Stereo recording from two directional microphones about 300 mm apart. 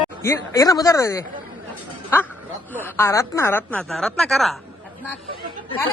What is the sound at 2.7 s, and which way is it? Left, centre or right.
Speech, centre.